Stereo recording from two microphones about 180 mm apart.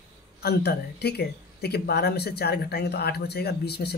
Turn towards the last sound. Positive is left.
turn(degrees=65)  # may be behind; listen again after turning